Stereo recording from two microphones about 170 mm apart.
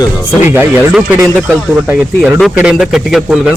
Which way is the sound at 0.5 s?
10° right (ahead or behind).